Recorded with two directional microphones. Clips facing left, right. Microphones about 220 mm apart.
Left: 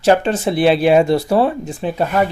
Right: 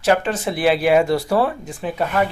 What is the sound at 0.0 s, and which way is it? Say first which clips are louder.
Speech: left 4 dB; 30° left (ahead or behind).